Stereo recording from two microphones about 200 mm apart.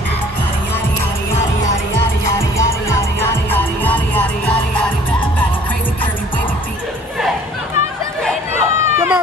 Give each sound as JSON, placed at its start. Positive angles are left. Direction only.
{"t": 2.3, "sound": "music", "side_deg": 15}
{"t": 8.5, "sound": "children playing", "side_deg": -10}